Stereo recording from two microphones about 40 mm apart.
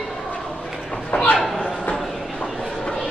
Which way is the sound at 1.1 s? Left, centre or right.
Left.